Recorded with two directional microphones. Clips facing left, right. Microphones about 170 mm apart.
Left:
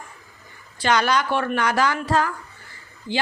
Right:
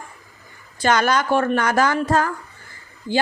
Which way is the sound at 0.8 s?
45° right (ahead or behind).